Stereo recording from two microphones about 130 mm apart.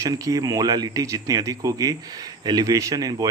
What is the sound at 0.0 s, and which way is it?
Speech, 25° right (ahead or behind).